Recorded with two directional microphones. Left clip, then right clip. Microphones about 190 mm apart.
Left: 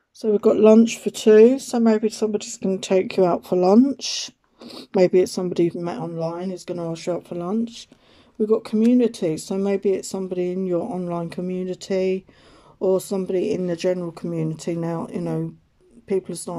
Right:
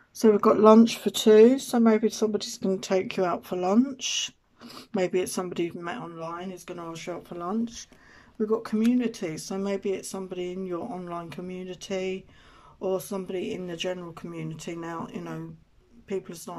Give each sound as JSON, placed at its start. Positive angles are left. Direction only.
{"t": 0.5, "sound": "speech", "side_deg": 10}